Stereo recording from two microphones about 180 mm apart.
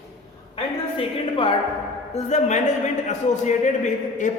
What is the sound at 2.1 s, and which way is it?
A man's voice, 40° left (ahead or behind).